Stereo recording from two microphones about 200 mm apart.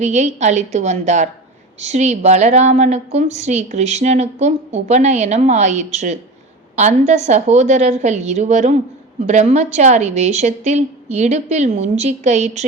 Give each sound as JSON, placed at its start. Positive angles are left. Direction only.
{"t": 0.0, "sound": "a woman's voice", "side_deg": -35}